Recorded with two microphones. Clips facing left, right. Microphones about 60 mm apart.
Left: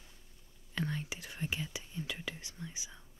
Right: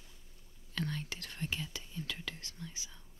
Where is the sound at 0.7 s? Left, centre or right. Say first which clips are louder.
Left 1 dB; centre.